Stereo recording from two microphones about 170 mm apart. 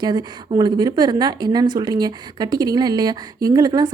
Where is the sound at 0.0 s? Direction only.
25° right (ahead or behind).